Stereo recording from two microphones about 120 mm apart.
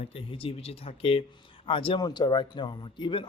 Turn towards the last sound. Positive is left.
turn(degrees=45)  # may be behind; listen again after turning